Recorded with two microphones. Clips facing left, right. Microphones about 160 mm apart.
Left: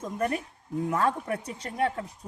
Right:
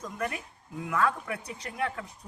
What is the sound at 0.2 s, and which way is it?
Speech, 40° left (ahead or behind).